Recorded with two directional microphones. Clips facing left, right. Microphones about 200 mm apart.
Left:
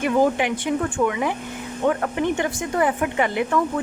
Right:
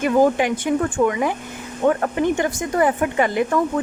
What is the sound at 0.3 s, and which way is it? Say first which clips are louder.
A woman's voice: right 3 dB; 45° right (ahead or behind).